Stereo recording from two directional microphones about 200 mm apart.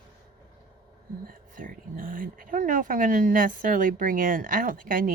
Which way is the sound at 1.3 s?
45° right (ahead or behind).